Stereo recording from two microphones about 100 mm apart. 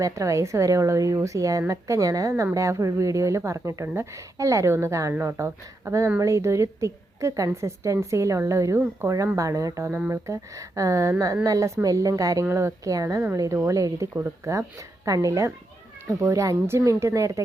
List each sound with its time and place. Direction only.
0.0 s a woman's voice: 30° right (ahead or behind)
14.1 s a woman's voice: 20° right (ahead or behind)